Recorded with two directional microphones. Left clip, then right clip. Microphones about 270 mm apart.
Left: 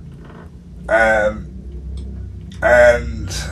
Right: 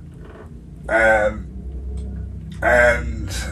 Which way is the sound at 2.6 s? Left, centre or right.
Centre.